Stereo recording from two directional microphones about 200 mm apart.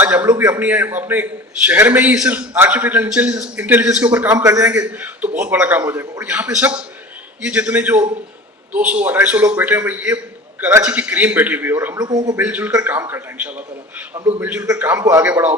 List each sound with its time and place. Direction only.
0.0 s a man's voice: 10° right (ahead or behind)
12.5 s a man's voice: 10° right (ahead or behind)